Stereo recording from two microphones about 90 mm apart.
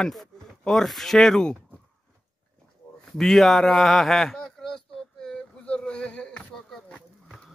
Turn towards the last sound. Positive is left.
turn(degrees=10)  # may be behind; listen again after turning